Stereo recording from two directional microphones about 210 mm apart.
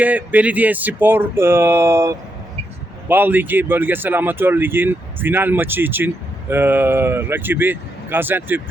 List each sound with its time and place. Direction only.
0.0 s speech: 10° right (ahead or behind)